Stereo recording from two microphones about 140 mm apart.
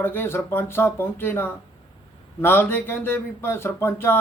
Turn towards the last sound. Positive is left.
turn(degrees=15)  # may be behind; listen again after turning